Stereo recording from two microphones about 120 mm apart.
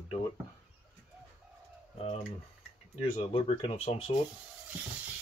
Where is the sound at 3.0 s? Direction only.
60° left (ahead or behind).